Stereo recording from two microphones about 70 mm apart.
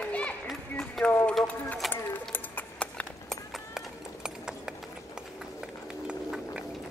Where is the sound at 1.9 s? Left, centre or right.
Left.